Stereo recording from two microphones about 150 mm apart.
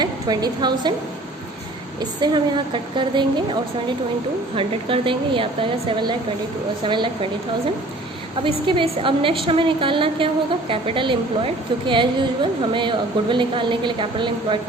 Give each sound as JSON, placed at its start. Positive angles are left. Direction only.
{"t": 0.0, "sound": "a woman's voice", "side_deg": -25}
{"t": 2.0, "sound": "a woman's voice", "side_deg": -30}
{"t": 8.4, "sound": "a woman's voice", "side_deg": -35}